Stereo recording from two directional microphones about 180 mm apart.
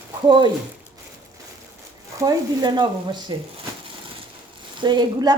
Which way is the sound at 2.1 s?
20° right (ahead or behind).